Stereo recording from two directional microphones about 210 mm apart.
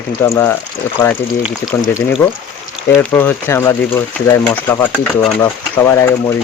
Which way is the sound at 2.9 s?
10° left (ahead or behind).